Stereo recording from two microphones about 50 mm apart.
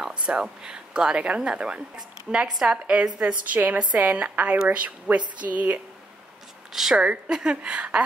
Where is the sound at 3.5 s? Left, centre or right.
Right.